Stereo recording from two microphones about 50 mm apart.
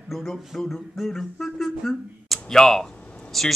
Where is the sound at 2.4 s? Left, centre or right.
Centre.